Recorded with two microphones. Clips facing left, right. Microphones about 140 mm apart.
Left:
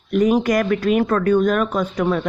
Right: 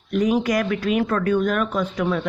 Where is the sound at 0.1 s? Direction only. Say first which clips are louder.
Left 3 dB; 50° left (ahead or behind).